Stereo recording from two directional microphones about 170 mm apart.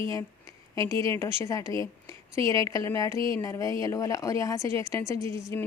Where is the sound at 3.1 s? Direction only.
30° right (ahead or behind).